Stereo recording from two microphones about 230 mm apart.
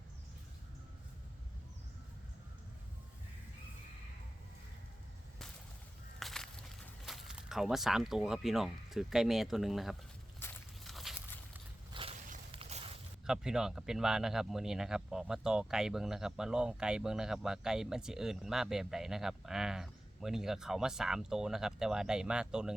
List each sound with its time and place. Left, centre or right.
6.1 s a sound: centre
7.0 s speech: centre
10.4 s walk: centre
11.9 s walk: right
13.2 s a man's voice: centre